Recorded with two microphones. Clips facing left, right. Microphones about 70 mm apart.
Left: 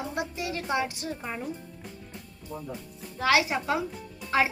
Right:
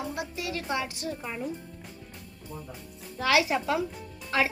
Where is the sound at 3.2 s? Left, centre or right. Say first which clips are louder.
Even; centre.